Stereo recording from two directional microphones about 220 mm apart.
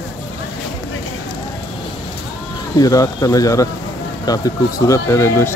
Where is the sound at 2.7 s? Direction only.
15° left (ahead or behind).